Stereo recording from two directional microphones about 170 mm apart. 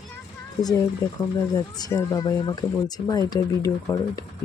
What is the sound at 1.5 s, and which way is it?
Speech, 20° left (ahead or behind).